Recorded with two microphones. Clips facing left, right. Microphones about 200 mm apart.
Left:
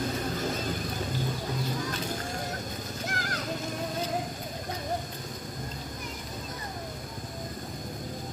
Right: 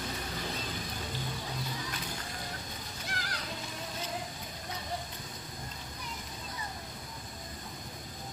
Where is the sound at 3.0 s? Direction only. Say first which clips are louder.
Left 6 dB; 45° left (ahead or behind).